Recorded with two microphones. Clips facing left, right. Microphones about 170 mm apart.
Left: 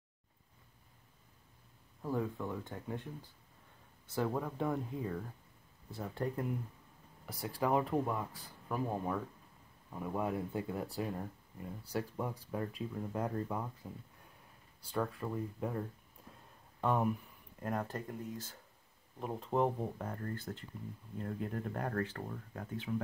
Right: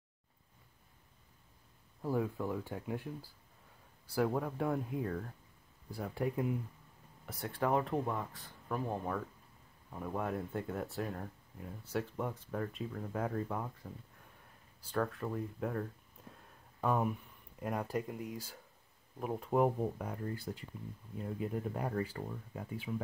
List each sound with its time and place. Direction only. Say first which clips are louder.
2.0 s speech: right 2 dB; 10° right (ahead or behind)
4.1 s speech: right 2 dB; 5° right (ahead or behind)
14.9 s speech: right 1 dB; 5° left (ahead or behind)
16.8 s speech: even; centre (ahead or behind)
19.1 s speech: right 2 dB; 5° right (ahead or behind)